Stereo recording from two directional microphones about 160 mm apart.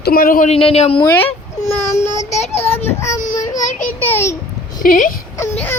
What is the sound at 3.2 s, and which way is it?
Child singing, 55° left (ahead or behind).